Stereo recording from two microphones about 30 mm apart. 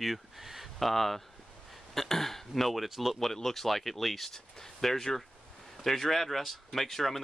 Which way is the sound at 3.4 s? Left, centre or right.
Centre.